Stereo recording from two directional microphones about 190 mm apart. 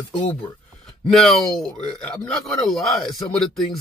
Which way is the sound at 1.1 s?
Centre (ahead or behind).